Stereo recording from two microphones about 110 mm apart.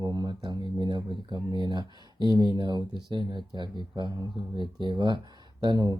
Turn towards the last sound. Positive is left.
turn(degrees=-40)  # may be behind; listen again after turning